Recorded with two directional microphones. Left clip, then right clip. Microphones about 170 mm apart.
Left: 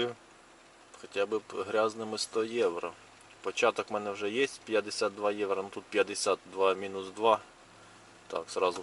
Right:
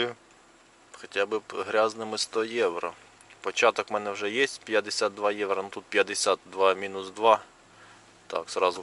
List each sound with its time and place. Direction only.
1.0 s speech: 5° right (ahead or behind)